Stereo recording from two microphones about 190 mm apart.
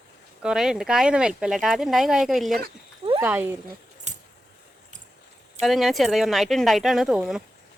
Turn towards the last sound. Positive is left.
turn(degrees=0)  # may be behind; listen again after turning